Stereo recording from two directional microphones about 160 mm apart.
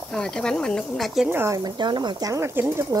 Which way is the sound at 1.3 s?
20° right (ahead or behind).